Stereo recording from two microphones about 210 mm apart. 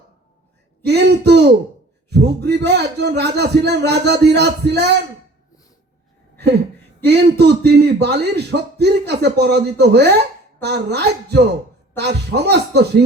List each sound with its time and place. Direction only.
0.9 s a sound: 50° right (ahead or behind)
2.0 s a man's voice: 50° right (ahead or behind)
7.1 s a man's voice: 50° right (ahead or behind)